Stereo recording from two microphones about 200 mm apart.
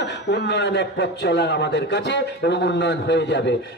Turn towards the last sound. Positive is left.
turn(degrees=60)  # may be behind; listen again after turning